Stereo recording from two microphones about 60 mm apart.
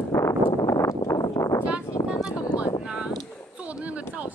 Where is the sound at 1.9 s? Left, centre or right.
Left.